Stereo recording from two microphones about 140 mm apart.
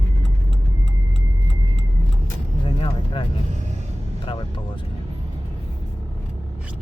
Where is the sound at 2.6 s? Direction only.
35° left (ahead or behind).